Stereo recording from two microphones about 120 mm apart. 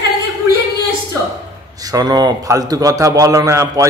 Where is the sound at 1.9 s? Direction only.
30° right (ahead or behind).